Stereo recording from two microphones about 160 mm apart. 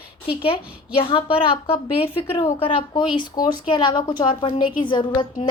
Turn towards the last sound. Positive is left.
turn(degrees=30)  # may be behind; listen again after turning